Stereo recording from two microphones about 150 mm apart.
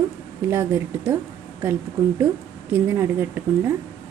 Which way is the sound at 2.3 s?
10° right (ahead or behind).